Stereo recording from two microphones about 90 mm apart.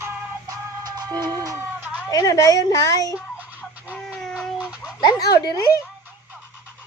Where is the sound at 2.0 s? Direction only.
40° left (ahead or behind).